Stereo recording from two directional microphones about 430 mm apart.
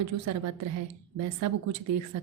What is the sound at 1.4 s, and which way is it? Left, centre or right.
Speech, right.